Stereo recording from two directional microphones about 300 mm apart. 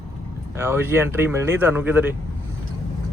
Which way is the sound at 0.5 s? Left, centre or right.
Centre.